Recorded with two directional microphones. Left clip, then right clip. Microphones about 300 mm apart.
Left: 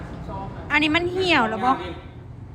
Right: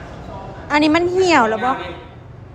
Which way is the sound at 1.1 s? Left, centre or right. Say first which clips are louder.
Right 6 dB; centre.